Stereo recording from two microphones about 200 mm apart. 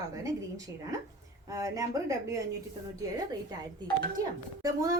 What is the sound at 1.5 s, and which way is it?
Speech, 15° right (ahead or behind).